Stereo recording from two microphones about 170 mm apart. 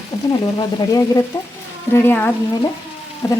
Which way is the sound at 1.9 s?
10° left (ahead or behind).